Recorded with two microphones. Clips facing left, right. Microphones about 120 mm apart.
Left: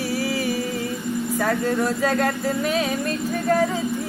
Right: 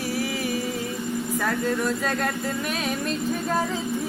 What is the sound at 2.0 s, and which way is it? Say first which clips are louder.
Music: left 5 dB; 75° left (ahead or behind).